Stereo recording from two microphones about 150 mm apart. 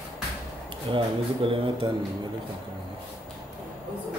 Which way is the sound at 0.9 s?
35° right (ahead or behind).